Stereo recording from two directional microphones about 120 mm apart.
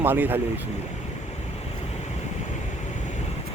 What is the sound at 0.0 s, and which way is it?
Speech, 15° right (ahead or behind).